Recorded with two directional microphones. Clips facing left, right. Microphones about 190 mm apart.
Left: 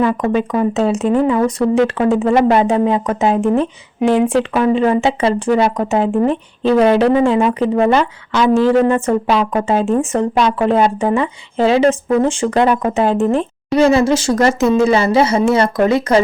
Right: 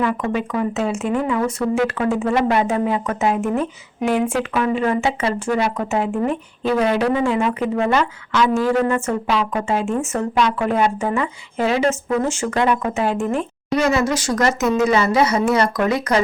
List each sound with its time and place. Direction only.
0.0 s speech: 30° left (ahead or behind)